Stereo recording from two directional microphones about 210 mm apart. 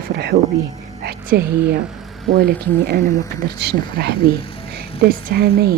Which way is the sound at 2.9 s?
40° right (ahead or behind).